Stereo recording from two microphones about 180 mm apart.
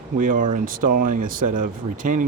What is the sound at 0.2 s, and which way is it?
Speech, 45° right (ahead or behind).